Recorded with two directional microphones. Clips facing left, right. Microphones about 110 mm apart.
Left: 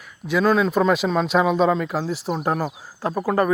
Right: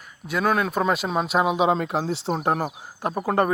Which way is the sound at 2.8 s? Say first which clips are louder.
Left 2 dB; 20° right (ahead or behind).